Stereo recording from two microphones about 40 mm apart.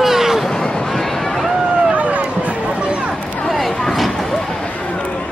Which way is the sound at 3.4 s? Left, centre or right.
Centre.